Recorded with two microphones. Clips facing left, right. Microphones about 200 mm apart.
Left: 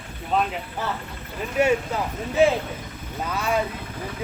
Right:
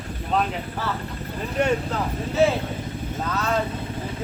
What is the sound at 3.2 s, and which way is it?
Speech, 10° left (ahead or behind).